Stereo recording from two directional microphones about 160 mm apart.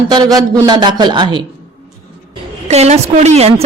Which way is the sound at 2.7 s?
40° right (ahead or behind).